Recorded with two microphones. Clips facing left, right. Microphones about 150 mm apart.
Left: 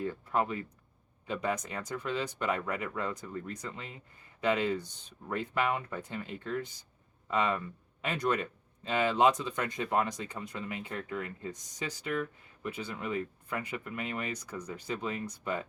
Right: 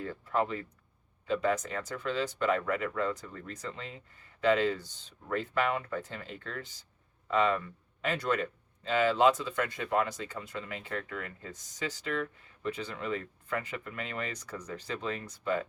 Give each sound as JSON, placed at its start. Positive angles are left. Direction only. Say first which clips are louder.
{"t": 0.0, "sound": "a sound", "louder": "even", "side_deg": 15}
{"t": 1.3, "sound": "speech", "louder": "right 4 dB", "side_deg": 15}
{"t": 12.6, "sound": "speech", "louder": "right 2 dB", "side_deg": 10}